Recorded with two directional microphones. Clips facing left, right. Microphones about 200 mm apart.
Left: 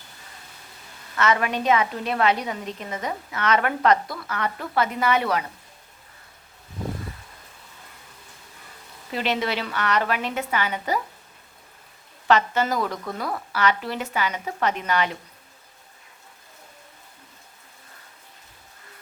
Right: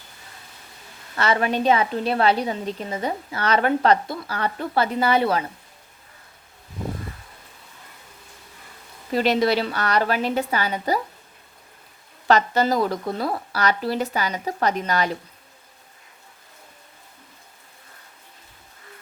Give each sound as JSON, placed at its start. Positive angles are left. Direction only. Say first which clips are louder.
{"t": 1.1, "sound": "a woman's voice", "louder": "right 1 dB", "side_deg": -30}
{"t": 9.1, "sound": "a woman's voice", "louder": "right 6 dB", "side_deg": -40}
{"t": 12.3, "sound": "a woman's voice", "louder": "right 2 dB", "side_deg": -35}